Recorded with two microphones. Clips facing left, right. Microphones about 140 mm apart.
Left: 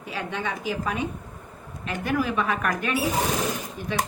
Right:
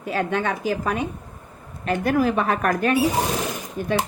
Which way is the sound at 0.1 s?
50° right (ahead or behind).